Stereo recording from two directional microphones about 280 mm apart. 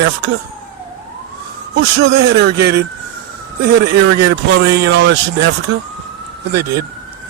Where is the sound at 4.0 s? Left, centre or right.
Right.